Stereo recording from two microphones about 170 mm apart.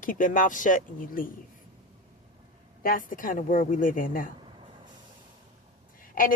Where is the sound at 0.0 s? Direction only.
50° left (ahead or behind).